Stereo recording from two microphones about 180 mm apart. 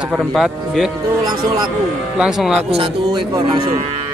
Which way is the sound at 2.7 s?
30° right (ahead or behind).